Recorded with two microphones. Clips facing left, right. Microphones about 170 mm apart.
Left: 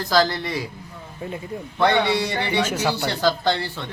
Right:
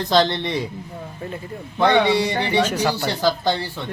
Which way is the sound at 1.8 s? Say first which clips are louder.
Right 3 dB; 15° right (ahead or behind).